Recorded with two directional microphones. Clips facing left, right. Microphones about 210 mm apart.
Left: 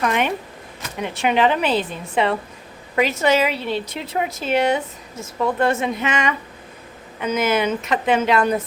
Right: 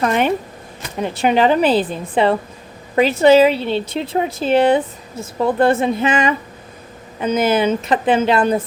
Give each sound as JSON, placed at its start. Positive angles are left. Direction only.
{"t": 0.0, "sound": "speech", "side_deg": -35}